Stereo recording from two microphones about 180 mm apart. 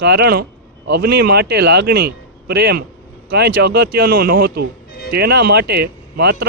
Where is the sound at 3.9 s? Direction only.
55° right (ahead or behind).